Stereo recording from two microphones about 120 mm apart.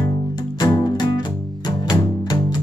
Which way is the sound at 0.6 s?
35° left (ahead or behind).